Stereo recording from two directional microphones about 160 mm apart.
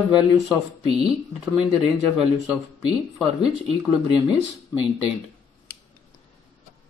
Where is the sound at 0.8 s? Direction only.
40° right (ahead or behind).